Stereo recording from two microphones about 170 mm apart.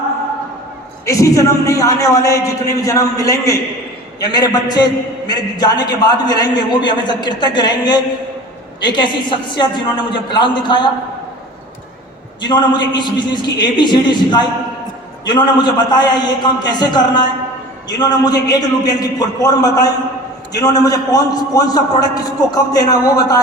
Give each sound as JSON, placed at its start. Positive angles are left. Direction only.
{"t": 1.0, "sound": "a man's voice", "side_deg": 20}
{"t": 12.4, "sound": "a man's voice", "side_deg": 25}